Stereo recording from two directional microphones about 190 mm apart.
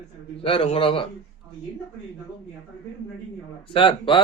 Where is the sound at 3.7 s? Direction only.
25° left (ahead or behind).